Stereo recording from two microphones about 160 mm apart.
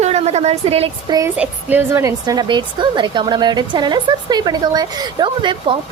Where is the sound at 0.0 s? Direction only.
45° right (ahead or behind).